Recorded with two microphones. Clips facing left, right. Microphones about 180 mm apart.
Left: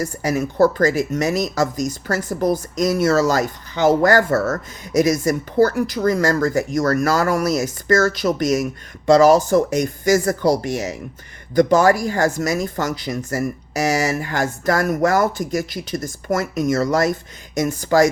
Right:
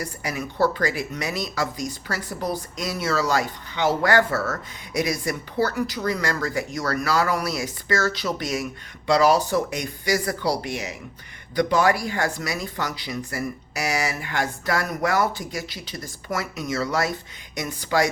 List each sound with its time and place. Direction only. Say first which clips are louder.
0.0 s speech: left 8 dB; 45° left (ahead or behind)